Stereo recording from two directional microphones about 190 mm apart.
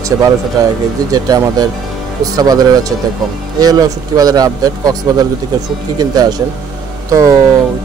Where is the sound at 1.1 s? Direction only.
20° right (ahead or behind).